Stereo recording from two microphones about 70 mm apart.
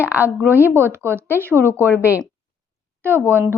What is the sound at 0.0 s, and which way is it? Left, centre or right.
Speech, right.